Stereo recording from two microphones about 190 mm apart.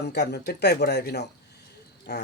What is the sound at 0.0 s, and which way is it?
A man's voice, 60° left (ahead or behind).